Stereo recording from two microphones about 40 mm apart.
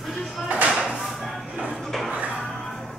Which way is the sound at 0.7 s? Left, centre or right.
Right.